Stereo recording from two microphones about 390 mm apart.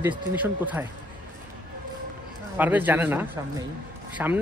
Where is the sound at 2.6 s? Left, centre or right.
Centre.